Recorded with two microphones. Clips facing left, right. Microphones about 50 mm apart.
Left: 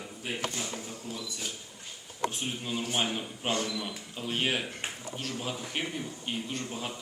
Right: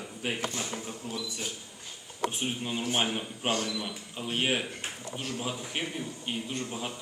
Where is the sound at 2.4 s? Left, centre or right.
Centre.